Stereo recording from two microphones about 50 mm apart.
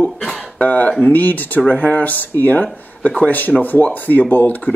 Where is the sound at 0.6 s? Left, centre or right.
Left.